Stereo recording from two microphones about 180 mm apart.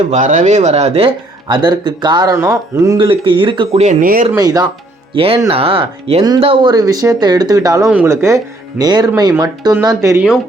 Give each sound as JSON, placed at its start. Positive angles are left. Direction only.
{"t": 0.1, "sound": "speech", "side_deg": -45}
{"t": 3.8, "sound": "speech", "side_deg": -50}
{"t": 4.4, "sound": "speech", "side_deg": -20}
{"t": 5.1, "sound": "speech", "side_deg": -30}